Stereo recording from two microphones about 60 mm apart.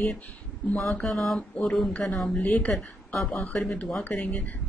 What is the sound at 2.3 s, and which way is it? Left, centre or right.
Speech, left.